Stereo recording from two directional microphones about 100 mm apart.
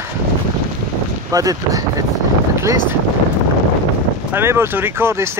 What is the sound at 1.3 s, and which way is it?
Speech, 35° right (ahead or behind).